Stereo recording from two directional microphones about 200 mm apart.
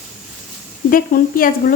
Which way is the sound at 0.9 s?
45° left (ahead or behind).